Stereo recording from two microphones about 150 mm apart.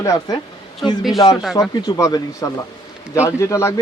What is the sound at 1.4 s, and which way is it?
Speech, centre (ahead or behind).